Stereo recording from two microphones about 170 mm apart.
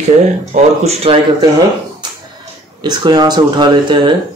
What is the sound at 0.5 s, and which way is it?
Speech, 35° right (ahead or behind).